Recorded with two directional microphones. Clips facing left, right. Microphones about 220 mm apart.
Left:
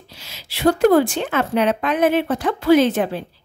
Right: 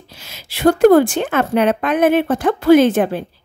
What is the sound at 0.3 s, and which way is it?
A woman's voice, 50° right (ahead or behind).